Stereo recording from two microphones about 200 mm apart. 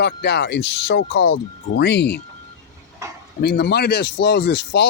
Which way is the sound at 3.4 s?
55° left (ahead or behind).